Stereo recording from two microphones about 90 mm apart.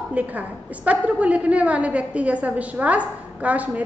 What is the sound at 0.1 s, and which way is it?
A woman's voice, 20° right (ahead or behind).